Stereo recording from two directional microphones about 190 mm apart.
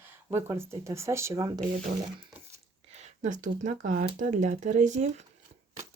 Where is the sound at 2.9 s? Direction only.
35° right (ahead or behind).